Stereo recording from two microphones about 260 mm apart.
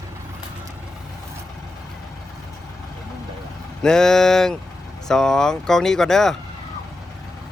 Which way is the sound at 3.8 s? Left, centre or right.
Centre.